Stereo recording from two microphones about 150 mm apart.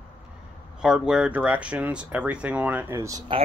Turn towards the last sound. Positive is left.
turn(degrees=-20)  # may be behind; listen again after turning